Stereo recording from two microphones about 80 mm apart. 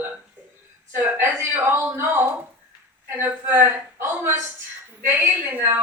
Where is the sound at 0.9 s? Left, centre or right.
Right.